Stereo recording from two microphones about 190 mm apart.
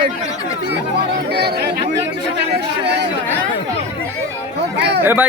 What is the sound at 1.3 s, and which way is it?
Speech, 60° right (ahead or behind).